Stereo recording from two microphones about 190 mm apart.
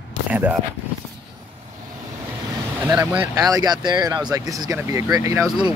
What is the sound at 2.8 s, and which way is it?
Speech, 15° right (ahead or behind).